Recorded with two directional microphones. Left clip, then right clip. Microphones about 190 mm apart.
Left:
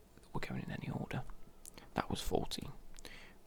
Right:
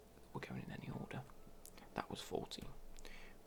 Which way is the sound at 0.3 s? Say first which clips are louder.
Left 6 dB; 20° left (ahead or behind).